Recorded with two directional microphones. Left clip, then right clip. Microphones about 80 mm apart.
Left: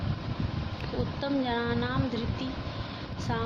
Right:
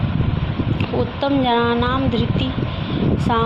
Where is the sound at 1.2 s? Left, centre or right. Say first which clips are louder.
Right 13 dB; right.